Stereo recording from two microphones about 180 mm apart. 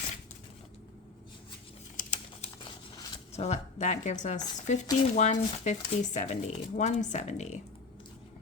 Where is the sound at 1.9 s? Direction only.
40° left (ahead or behind).